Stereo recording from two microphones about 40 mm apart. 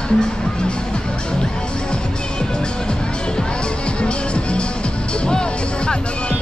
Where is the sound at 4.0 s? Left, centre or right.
Left.